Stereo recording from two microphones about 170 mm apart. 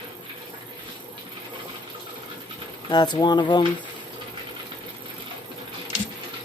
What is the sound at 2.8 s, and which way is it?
Speech, 25° left (ahead or behind).